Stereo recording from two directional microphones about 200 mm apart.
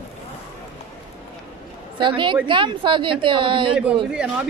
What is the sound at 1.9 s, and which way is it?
A woman's voice, 25° right (ahead or behind).